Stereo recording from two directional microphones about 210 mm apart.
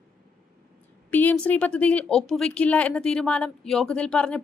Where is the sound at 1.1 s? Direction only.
10° left (ahead or behind).